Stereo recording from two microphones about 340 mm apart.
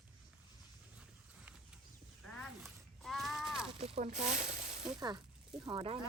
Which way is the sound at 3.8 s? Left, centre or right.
Centre.